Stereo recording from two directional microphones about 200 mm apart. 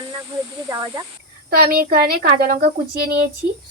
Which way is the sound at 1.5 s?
50° right (ahead or behind).